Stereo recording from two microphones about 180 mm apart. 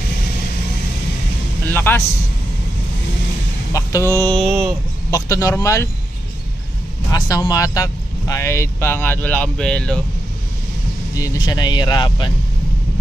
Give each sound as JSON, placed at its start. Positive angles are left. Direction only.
{"t": 1.7, "sound": "a sound", "side_deg": 10}
{"t": 3.7, "sound": "speech", "side_deg": 15}
{"t": 5.1, "sound": "speech", "side_deg": 15}
{"t": 7.1, "sound": "speech", "side_deg": 20}
{"t": 11.1, "sound": "speech", "side_deg": 20}